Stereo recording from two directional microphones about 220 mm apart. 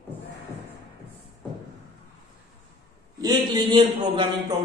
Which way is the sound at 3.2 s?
20° right (ahead or behind).